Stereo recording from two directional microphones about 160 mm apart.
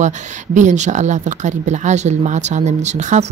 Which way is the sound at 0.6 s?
50° right (ahead or behind).